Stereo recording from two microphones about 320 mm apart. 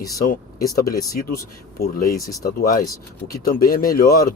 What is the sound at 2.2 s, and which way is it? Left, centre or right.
Speech, centre.